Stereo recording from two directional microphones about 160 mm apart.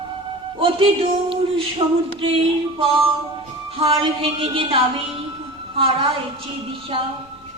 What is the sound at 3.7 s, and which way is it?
Singing, 35° right (ahead or behind).